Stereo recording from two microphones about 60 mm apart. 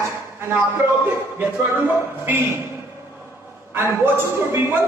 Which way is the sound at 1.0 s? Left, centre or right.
Right.